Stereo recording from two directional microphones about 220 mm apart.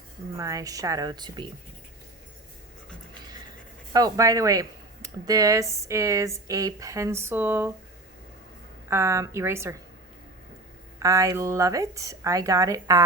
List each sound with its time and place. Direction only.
0.3 s speech: 15° right (ahead or behind)
3.9 s speech: 15° right (ahead or behind)
8.9 s speech: 10° right (ahead or behind)
11.0 s speech: 15° right (ahead or behind)